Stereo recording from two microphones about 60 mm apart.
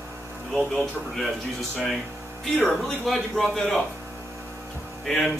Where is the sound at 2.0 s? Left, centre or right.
Right.